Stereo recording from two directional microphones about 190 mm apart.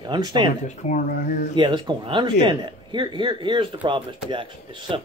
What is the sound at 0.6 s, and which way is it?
Speech, 40° left (ahead or behind).